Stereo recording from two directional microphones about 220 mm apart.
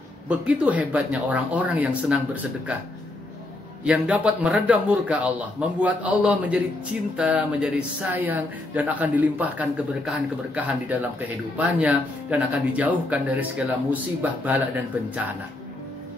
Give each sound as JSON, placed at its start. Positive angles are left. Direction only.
{"t": 0.3, "sound": "a man's voice", "side_deg": -5}
{"t": 3.8, "sound": "a man's voice", "side_deg": -5}